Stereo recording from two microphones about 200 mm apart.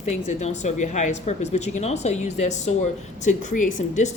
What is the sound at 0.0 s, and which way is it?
A woman's voice, 35° left (ahead or behind).